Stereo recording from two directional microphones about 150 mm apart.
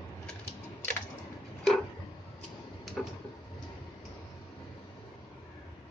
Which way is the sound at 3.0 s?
Centre (ahead or behind).